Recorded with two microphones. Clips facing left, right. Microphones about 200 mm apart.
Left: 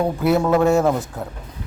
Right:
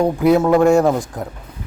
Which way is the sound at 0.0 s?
15° right (ahead or behind).